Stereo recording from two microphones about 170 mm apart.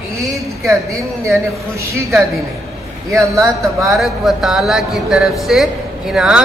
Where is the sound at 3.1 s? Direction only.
20° right (ahead or behind).